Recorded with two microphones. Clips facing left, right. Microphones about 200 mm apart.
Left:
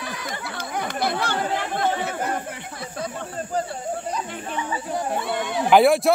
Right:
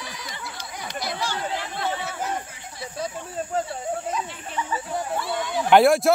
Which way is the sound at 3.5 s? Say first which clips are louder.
Left 1 dB; centre (ahead or behind).